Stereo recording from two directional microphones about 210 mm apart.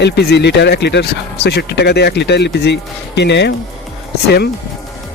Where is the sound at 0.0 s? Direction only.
55° left (ahead or behind).